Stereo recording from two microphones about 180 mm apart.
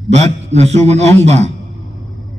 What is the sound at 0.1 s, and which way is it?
A man's voice, 35° right (ahead or behind).